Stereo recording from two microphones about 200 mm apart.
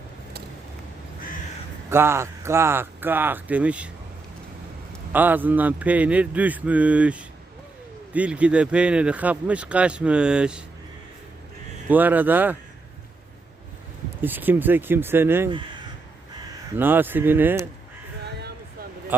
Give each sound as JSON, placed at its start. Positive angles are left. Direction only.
{"t": 1.9, "sound": "a man's voice", "side_deg": -10}
{"t": 5.1, "sound": "a man's voice", "side_deg": -10}
{"t": 11.9, "sound": "a man's voice", "side_deg": -10}
{"t": 14.2, "sound": "a man's voice", "side_deg": -10}
{"t": 16.7, "sound": "a man's voice", "side_deg": -10}
{"t": 18.3, "sound": "a sound", "side_deg": -55}